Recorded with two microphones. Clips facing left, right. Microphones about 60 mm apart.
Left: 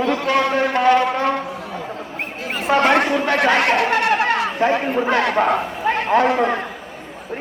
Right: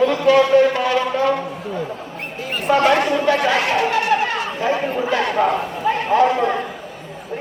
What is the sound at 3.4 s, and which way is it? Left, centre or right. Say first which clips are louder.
Chatter: left 2 dB; left.